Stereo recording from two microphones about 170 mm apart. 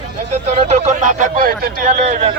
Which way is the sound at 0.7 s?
50° right (ahead or behind).